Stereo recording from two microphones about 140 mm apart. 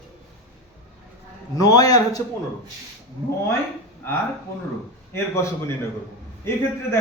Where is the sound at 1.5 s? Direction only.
25° left (ahead or behind).